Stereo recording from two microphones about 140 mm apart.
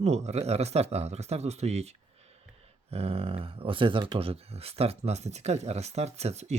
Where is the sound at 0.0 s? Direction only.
50° right (ahead or behind).